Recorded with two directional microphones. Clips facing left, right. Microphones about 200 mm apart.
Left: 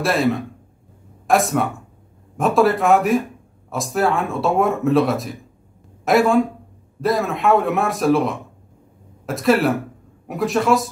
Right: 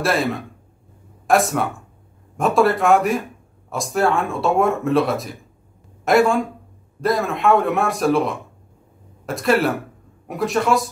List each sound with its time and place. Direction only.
0.0 s speech: centre (ahead or behind)